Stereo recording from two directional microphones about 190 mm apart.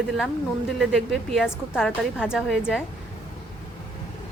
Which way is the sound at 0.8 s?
Centre (ahead or behind).